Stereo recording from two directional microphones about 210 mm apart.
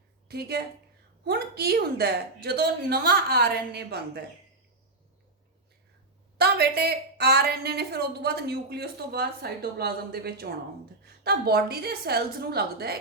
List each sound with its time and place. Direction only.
0.3 s a woman's voice: 50° right (ahead or behind)
6.3 s a woman's voice: 50° right (ahead or behind)